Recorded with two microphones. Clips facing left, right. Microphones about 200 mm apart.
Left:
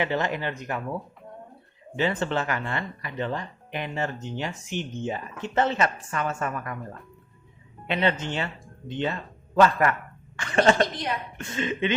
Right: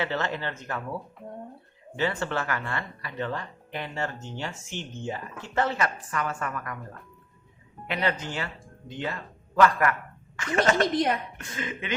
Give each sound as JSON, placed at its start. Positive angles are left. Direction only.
{"t": 0.0, "sound": "speech", "side_deg": 15}
{"t": 2.0, "sound": "speech", "side_deg": 20}
{"t": 7.9, "sound": "a man's voice", "side_deg": 25}